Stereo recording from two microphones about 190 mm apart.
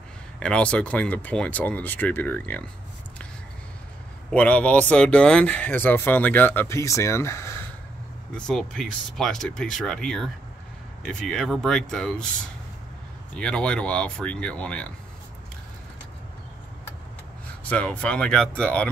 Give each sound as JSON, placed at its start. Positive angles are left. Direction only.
{"t": 0.4, "sound": "speech", "side_deg": 5}
{"t": 4.3, "sound": "speech", "side_deg": 5}
{"t": 8.4, "sound": "speech", "side_deg": 0}
{"t": 13.3, "sound": "speech", "side_deg": 5}
{"t": 17.6, "sound": "speech", "side_deg": 5}